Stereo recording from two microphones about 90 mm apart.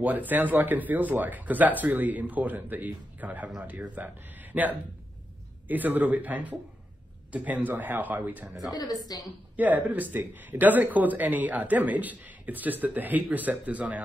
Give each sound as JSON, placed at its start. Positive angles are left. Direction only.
{"t": 0.0, "sound": "speech", "side_deg": -20}
{"t": 8.7, "sound": "a woman's voice", "side_deg": 50}
{"t": 9.6, "sound": "speech", "side_deg": -20}